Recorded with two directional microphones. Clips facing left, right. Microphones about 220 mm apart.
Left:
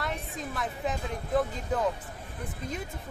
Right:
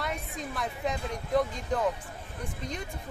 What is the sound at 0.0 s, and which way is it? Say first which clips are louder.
Speech: even; centre (ahead or behind).